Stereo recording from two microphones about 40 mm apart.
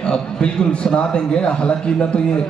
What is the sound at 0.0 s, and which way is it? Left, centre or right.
A man's voice, left.